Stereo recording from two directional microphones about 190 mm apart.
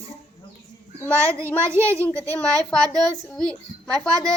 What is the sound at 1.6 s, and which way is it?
Speech, 15° right (ahead or behind).